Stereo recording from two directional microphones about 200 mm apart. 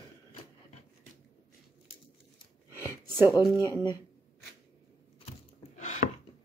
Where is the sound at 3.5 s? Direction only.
15° left (ahead or behind).